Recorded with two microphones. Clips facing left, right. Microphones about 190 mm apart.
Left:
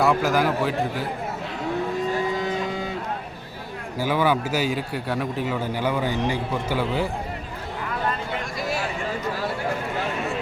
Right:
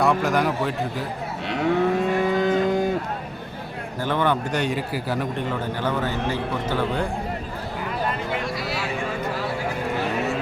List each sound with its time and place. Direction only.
0.0 s a man's voice: centre (ahead or behind)
1.5 s moo: 65° right (ahead or behind); by 2.9 s 50° right (ahead or behind)
4.0 s a man's voice: 5° left (ahead or behind)